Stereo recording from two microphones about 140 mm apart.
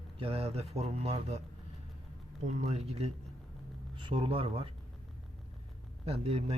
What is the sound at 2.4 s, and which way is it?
Speech, 55° right (ahead or behind).